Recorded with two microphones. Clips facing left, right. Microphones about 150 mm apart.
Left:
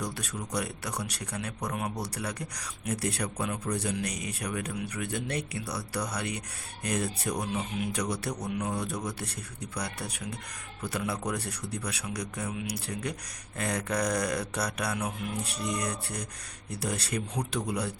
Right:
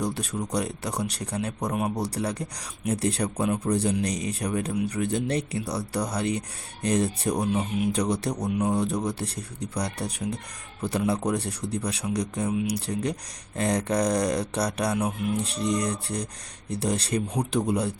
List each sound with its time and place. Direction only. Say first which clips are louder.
0.0 s speech: right 7 dB; 30° right (ahead or behind)